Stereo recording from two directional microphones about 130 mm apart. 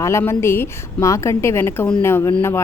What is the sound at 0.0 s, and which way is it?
Speech, 20° left (ahead or behind).